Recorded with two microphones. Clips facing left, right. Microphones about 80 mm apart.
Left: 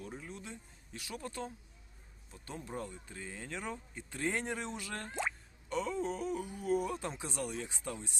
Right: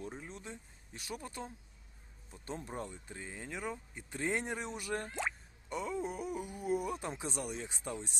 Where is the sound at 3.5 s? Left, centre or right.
Centre.